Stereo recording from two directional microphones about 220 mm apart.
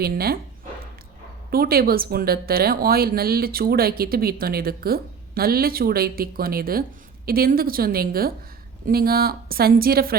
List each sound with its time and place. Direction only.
0.0 s speech: 45° right (ahead or behind)
1.5 s speech: 45° right (ahead or behind)